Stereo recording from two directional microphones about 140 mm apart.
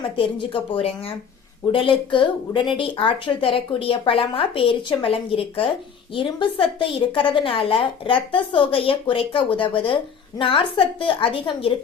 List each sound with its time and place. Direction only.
0.2 s a woman's voice: 35° left (ahead or behind)